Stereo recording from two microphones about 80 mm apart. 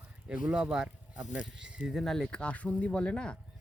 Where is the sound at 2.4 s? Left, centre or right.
Centre.